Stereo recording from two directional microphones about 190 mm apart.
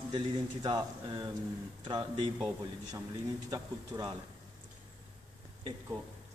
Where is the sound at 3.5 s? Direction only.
20° right (ahead or behind).